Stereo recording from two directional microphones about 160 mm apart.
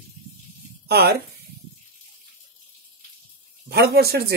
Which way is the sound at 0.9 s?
85° right.